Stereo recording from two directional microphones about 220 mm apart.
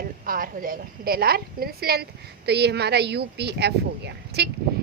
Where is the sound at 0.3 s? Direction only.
40° right (ahead or behind).